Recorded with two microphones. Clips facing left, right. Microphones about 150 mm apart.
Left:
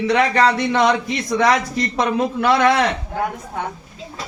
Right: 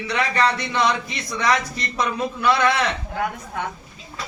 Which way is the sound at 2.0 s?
50° left (ahead or behind).